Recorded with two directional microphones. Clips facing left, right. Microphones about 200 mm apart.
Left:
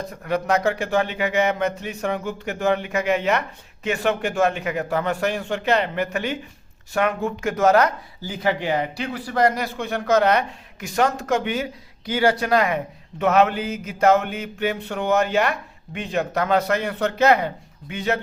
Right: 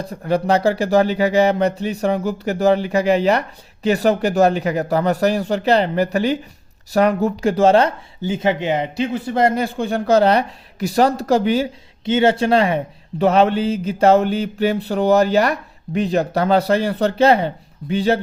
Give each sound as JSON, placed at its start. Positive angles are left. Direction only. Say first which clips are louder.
{"t": 0.0, "sound": "speech", "louder": "right 5 dB", "side_deg": -30}